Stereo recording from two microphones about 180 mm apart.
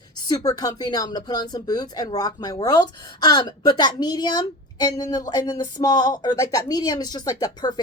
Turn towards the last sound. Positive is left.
turn(degrees=20)  # may be behind; listen again after turning